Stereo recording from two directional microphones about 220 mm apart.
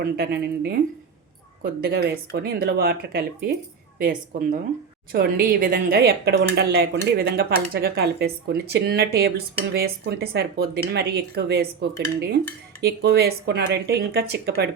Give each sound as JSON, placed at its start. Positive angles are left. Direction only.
{"t": 0.0, "sound": "a woman's voice", "side_deg": -45}